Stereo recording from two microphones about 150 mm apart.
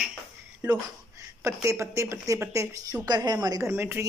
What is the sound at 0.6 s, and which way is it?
A woman's voice, 20° right (ahead or behind).